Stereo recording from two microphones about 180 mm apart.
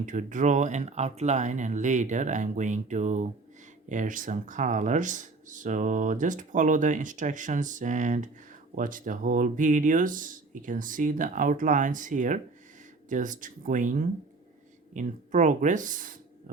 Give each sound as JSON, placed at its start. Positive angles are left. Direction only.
{"t": 0.0, "sound": "speech", "side_deg": -45}